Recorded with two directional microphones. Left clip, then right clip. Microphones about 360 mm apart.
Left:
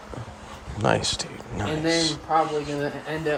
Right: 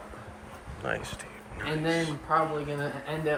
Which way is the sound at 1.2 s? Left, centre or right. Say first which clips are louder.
Left 6 dB; centre.